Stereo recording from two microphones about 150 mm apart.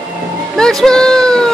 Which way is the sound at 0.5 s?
5° left (ahead or behind).